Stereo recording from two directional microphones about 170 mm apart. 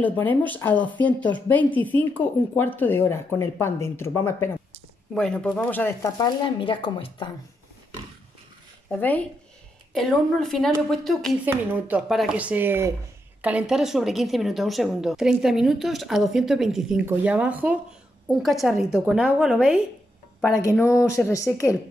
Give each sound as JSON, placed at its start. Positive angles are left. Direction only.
{"t": 0.0, "sound": "a woman's voice", "side_deg": 10}
{"t": 5.1, "sound": "a woman's voice", "side_deg": 5}
{"t": 8.9, "sound": "a woman's voice", "side_deg": 10}
{"t": 11.4, "sound": "a woman's voice", "side_deg": -10}
{"t": 20.7, "sound": "a woman's voice", "side_deg": 15}